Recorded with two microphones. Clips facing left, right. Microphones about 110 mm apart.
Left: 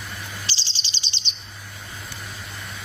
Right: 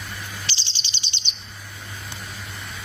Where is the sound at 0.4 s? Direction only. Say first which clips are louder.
Even; 35° left (ahead or behind).